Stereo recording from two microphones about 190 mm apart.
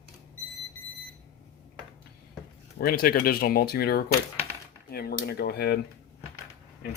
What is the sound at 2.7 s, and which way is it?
Speech, 50° left (ahead or behind).